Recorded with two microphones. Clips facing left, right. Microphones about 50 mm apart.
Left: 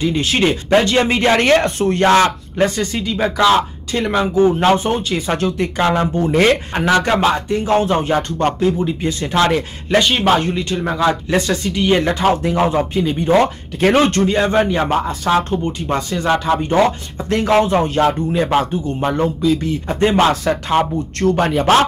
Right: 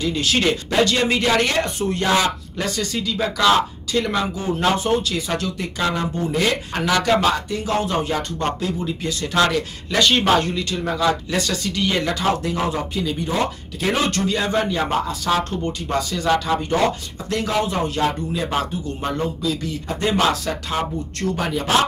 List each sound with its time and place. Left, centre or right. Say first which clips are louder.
0.0 s speech: left 4 dB; left
2.5 s speech: left 7 dB; left
5.9 s speech: left 7 dB; left
6.7 s speech: left 3 dB; left
13.3 s speech: left 9 dB; left
17.5 s speech: left 9 dB; left
20.7 s speech: left 8 dB; left